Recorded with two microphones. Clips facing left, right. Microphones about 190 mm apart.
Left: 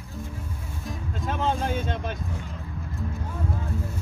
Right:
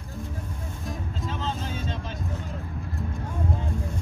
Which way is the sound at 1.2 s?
55° left (ahead or behind).